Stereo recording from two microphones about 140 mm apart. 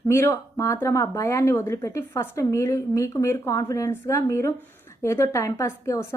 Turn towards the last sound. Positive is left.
turn(degrees=20)  # may be behind; listen again after turning